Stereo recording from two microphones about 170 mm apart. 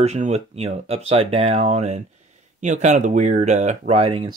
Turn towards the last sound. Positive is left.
turn(degrees=-35)  # may be behind; listen again after turning